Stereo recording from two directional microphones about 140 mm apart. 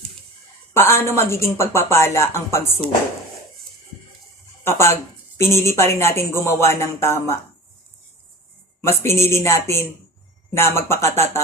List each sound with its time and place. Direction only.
0.7 s a woman's voice: 20° left (ahead or behind)
4.6 s a woman's voice: 20° left (ahead or behind)
8.8 s a woman's voice: 20° left (ahead or behind)